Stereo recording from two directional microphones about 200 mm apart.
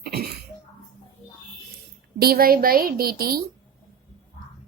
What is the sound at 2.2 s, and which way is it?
Speech, 50° right (ahead or behind).